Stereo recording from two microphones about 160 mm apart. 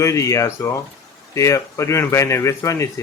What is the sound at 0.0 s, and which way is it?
Speech, 20° left (ahead or behind).